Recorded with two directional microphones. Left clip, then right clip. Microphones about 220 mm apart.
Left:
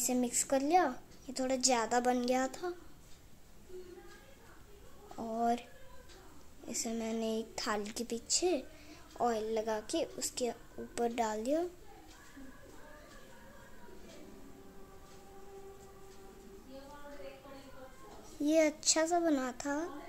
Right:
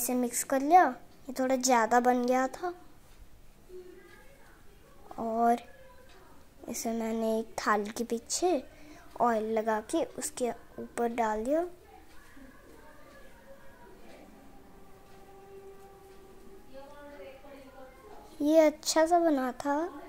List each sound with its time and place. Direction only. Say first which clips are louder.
0.0 s a woman's voice: right 3 dB; 15° right (ahead or behind)
5.1 s a woman's voice: right 7 dB; 15° right (ahead or behind)
6.7 s a woman's voice: right 5 dB; 15° right (ahead or behind)
18.4 s a woman's voice: right 6 dB; 10° right (ahead or behind)